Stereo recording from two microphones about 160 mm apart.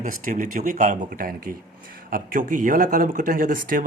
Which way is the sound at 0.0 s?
55° right (ahead or behind).